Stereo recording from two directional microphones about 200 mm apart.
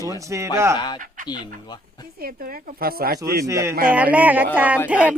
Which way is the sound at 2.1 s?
45° right (ahead or behind).